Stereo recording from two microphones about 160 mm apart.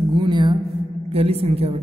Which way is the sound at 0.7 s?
40° right (ahead or behind).